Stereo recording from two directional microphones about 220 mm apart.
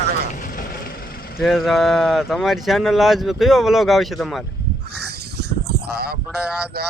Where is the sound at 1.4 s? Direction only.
Centre (ahead or behind).